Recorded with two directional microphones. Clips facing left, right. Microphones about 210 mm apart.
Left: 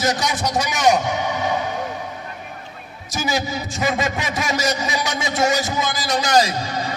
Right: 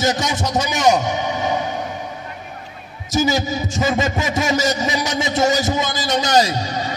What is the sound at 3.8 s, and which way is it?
Speech, 40° right (ahead or behind).